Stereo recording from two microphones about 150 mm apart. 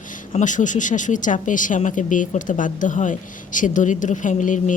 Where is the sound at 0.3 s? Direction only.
55° left (ahead or behind).